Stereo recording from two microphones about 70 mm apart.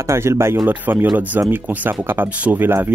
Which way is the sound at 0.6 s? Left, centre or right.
Right.